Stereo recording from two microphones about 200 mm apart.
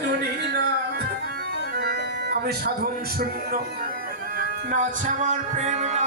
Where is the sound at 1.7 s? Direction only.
50° right (ahead or behind).